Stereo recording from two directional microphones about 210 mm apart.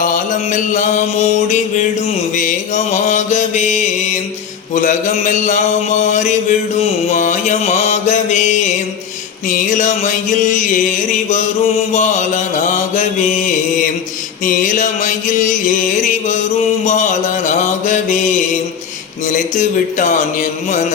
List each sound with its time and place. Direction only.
0.0 s mantra: 40° left (ahead or behind)
2.3 s a man's voice: 35° left (ahead or behind)
13.0 s mantra: 35° left (ahead or behind)
14.4 s music: 40° left (ahead or behind)
16.8 s mantra: 35° left (ahead or behind)
19.3 s a man's voice: 40° left (ahead or behind)